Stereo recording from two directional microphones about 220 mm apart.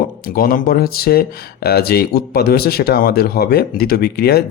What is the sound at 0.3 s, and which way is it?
Speech, 40° left (ahead or behind).